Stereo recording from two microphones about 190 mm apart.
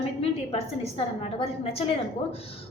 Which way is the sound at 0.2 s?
30° left (ahead or behind).